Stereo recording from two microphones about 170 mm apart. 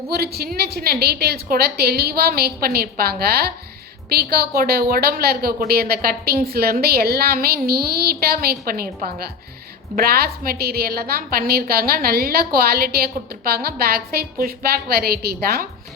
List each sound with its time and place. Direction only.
0.1 s a woman's voice: 65° right (ahead or behind)